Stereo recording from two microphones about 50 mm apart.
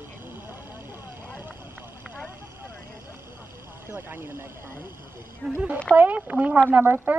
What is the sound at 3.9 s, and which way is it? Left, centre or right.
Speech, right.